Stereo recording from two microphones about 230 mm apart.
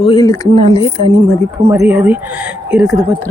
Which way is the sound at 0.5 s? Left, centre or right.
Right.